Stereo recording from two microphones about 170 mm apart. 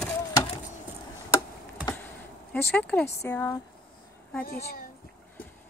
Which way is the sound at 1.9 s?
10° left (ahead or behind).